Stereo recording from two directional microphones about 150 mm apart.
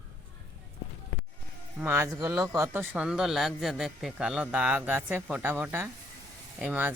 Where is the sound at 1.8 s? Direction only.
15° right (ahead or behind).